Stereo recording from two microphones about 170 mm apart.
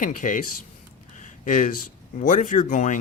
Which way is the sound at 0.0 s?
50° left (ahead or behind).